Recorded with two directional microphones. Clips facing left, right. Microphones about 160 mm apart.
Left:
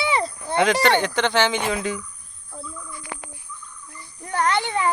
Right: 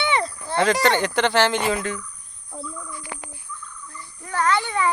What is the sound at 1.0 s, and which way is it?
Speech, 5° right (ahead or behind).